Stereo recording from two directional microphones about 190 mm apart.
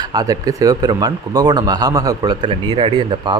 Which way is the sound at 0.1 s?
20° right (ahead or behind).